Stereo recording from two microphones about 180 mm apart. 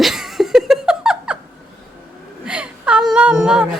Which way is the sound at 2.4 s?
5° right (ahead or behind).